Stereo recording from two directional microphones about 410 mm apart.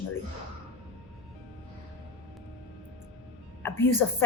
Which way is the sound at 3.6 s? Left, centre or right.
Centre.